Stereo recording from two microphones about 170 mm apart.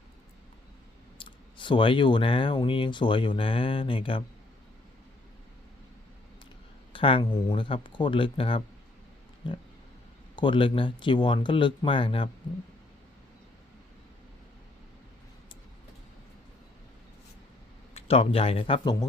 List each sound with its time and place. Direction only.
1.2 s speech: 30° left (ahead or behind)
6.9 s speech: 30° left (ahead or behind)
10.3 s speech: 30° left (ahead or behind)
17.9 s speech: 35° left (ahead or behind)